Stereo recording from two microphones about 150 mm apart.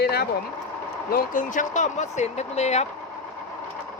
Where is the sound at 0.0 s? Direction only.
90° left.